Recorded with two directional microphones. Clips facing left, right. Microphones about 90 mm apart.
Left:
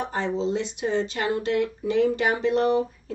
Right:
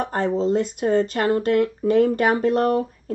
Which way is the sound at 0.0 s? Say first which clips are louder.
Right 4 dB; 50° right (ahead or behind).